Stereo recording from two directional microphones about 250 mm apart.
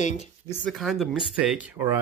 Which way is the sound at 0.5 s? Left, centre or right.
Centre.